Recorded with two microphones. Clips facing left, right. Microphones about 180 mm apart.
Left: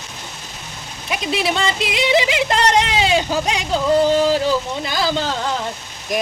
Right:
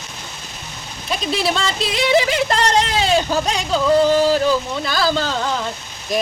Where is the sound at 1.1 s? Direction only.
15° left (ahead or behind).